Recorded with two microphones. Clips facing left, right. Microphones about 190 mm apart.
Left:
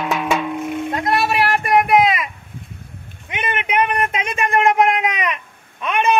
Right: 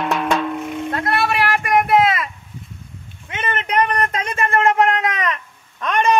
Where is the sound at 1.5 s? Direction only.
35° left (ahead or behind).